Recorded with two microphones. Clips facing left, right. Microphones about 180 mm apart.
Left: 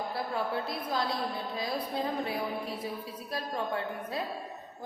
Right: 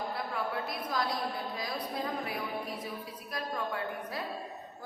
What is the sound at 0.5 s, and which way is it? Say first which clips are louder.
Speech: left 2 dB; 30° left (ahead or behind).